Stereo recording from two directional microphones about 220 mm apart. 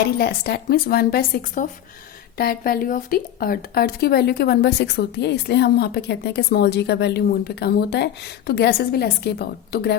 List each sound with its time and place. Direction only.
0.2 s a woman's voice: 45° left (ahead or behind)